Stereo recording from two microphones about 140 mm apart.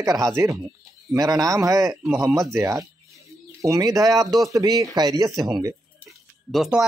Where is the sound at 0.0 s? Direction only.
25° right (ahead or behind).